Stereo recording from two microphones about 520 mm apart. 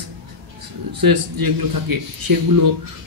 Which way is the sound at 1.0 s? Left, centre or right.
Right.